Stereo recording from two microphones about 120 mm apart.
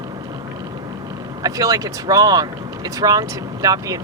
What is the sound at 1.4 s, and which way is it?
Speech, 30° right (ahead or behind).